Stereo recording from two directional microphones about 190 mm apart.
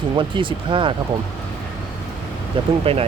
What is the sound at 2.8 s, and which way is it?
Speech, 30° right (ahead or behind).